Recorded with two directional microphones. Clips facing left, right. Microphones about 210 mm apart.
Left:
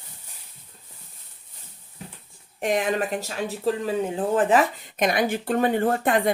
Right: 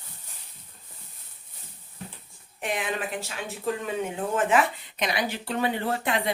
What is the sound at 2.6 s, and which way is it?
Speech, 45° left (ahead or behind).